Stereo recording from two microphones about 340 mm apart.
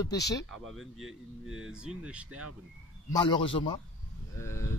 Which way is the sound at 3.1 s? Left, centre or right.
Centre.